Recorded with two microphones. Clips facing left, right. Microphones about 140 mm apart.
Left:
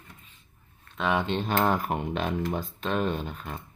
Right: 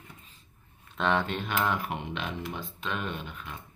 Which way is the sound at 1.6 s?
40° left (ahead or behind).